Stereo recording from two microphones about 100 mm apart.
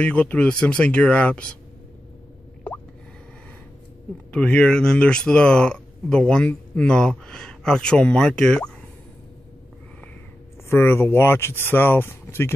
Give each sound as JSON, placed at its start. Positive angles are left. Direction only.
{"t": 0.0, "sound": "speech", "side_deg": 10}
{"t": 4.3, "sound": "speech", "side_deg": 10}
{"t": 10.7, "sound": "speech", "side_deg": 20}